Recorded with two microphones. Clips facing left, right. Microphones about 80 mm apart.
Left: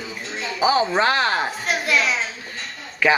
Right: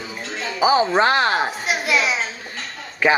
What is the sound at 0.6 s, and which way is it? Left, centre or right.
A child's voice, centre.